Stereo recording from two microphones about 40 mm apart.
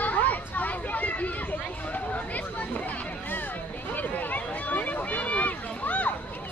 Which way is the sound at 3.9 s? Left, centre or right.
Left.